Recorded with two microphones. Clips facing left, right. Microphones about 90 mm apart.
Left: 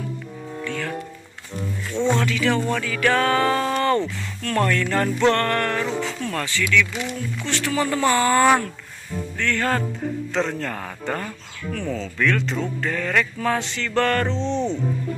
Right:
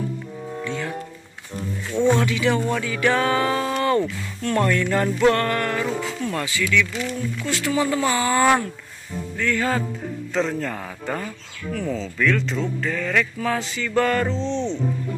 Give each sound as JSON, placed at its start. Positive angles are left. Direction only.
{"t": 0.7, "sound": "speech", "side_deg": -20}
{"t": 1.9, "sound": "music", "side_deg": -15}
{"t": 6.9, "sound": "speech", "side_deg": 15}
{"t": 7.4, "sound": "music", "side_deg": -10}
{"t": 9.4, "sound": "speech", "side_deg": -5}